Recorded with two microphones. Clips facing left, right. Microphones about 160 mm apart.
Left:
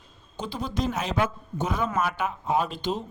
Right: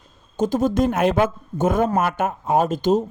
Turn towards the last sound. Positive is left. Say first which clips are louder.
# right 9 dB
turn(degrees=-45)  # may be behind; listen again after turning